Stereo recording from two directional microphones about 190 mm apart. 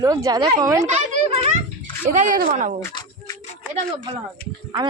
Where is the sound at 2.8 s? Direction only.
20° left (ahead or behind).